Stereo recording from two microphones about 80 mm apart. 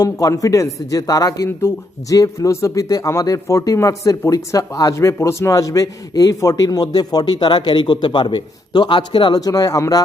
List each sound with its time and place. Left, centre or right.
0.0 s a man's voice: left